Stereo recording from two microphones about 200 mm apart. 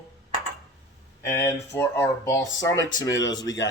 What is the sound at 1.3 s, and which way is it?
Speech, 10° left (ahead or behind).